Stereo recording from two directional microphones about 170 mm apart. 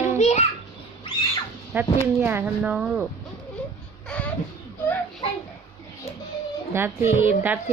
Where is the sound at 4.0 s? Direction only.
5° left (ahead or behind).